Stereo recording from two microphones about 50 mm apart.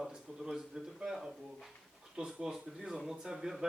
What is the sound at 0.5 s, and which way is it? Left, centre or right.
Speech, centre.